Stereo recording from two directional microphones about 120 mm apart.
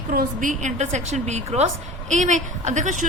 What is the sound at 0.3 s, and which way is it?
A woman's voice, 85° right.